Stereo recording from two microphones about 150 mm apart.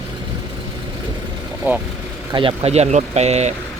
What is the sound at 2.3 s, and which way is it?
Speech, 40° right (ahead or behind).